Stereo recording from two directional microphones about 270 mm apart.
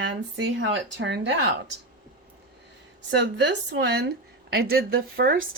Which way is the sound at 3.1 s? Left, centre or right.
Right.